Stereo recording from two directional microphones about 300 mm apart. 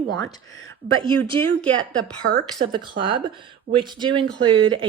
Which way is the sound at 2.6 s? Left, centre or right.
Centre.